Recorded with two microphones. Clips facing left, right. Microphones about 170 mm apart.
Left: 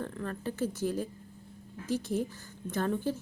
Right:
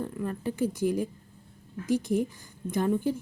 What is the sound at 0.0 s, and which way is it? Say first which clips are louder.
Speech: right 4 dB; 10° right (ahead or behind).